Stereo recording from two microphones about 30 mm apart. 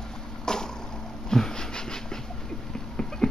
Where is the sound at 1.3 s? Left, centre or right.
Left.